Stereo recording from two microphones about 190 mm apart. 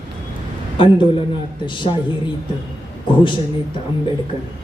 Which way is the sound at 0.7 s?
25° left (ahead or behind).